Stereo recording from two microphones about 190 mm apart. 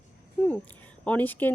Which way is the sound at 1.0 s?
10° left (ahead or behind).